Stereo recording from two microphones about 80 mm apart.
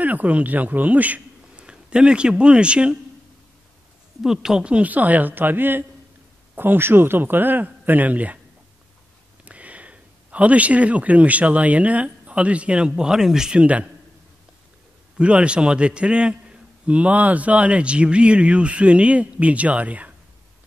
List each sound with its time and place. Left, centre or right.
0.0 s a man's voice: centre
4.2 s a man's voice: centre
9.4 s speech: centre
15.1 s a man's voice: centre